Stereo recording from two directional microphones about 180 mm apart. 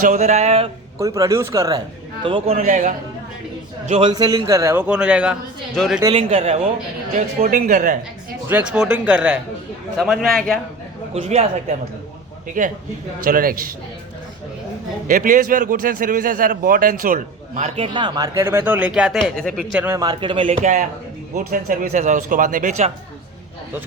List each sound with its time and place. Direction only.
0.0 s speech: 40° right (ahead or behind)
0.9 s a man's voice: 15° right (ahead or behind)
2.2 s speech: 30° right (ahead or behind)
3.8 s a man's voice: 30° right (ahead or behind); by 6.0 s centre (ahead or behind)
6.1 s speech: 30° right (ahead or behind)
7.4 s a man's voice: 50° right (ahead or behind)
8.4 s a man's voice: 10° right (ahead or behind)
11.1 s speech: 35° right (ahead or behind)
12.6 s a man's voice: 45° right (ahead or behind)
15.0 s a man's voice: 50° right (ahead or behind)
17.6 s speech: 30° right (ahead or behind); by 19.8 s 5° left (ahead or behind)
19.8 s speech: 20° right (ahead or behind)
20.5 s a man's voice: 45° right (ahead or behind)